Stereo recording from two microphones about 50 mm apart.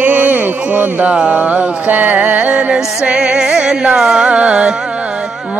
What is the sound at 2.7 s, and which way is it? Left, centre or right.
Music, centre.